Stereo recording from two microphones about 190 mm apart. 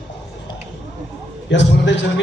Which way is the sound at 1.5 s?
70° left (ahead or behind).